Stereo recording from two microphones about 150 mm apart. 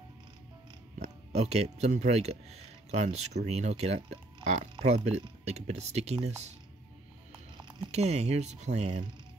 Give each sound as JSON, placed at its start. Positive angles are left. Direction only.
{"t": 0.9, "sound": "speech", "side_deg": -50}
{"t": 7.9, "sound": "speech", "side_deg": -45}